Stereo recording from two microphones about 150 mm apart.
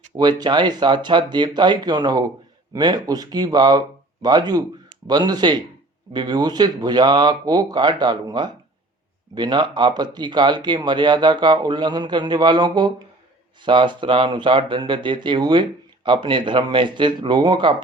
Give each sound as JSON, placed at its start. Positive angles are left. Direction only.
{"t": 0.2, "sound": "speech", "side_deg": -30}